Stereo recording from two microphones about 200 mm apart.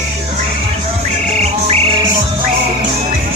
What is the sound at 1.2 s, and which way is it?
Music, 35° right (ahead or behind).